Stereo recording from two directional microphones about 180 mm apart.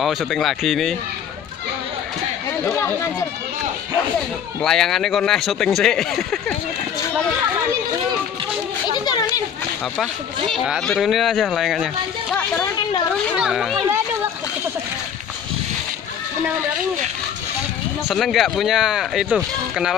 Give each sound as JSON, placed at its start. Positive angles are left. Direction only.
{"t": 0.0, "sound": "speech", "side_deg": 0}
{"t": 2.6, "sound": "speech", "side_deg": 10}
{"t": 4.6, "sound": "speech", "side_deg": 5}
{"t": 8.8, "sound": "a sound", "side_deg": 25}
{"t": 10.5, "sound": "speech", "side_deg": 0}
{"t": 18.0, "sound": "speech", "side_deg": 0}